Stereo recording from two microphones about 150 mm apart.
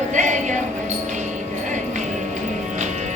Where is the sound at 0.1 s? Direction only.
55° right (ahead or behind).